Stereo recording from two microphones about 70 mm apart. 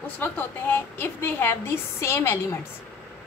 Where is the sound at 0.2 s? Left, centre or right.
Left.